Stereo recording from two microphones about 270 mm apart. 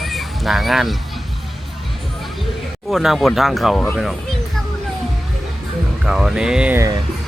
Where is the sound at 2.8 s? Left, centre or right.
Centre.